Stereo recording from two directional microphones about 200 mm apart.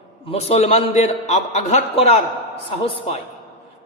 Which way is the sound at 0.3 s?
30° left (ahead or behind).